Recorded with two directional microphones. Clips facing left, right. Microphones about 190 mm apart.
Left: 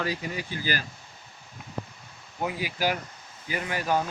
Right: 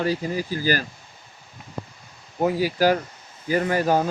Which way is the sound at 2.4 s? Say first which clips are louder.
Right 9 dB; 40° right (ahead or behind).